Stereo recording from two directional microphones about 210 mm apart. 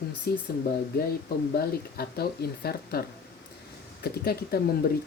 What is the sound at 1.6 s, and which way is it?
Speech, 50° left (ahead or behind).